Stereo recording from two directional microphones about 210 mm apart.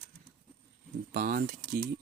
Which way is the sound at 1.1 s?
40° right (ahead or behind).